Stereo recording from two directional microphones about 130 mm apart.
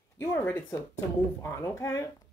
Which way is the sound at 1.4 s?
25° left (ahead or behind).